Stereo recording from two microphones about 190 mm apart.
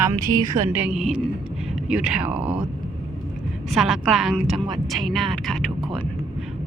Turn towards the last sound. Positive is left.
turn(degrees=0)  # may be behind; listen again after turning